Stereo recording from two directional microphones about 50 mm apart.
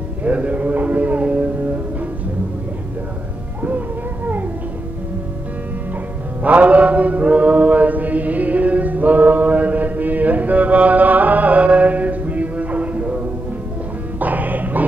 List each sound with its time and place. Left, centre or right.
0.2 s a sound: right
6.4 s chant: right
14.2 s music: right